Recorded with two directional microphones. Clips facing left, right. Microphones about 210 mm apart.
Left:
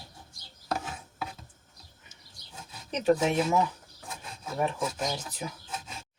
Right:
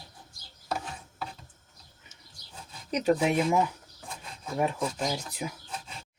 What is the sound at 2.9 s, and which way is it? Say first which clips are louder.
Speech: even; 10° right (ahead or behind).